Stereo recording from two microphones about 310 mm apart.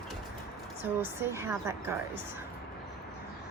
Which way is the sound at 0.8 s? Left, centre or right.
Centre.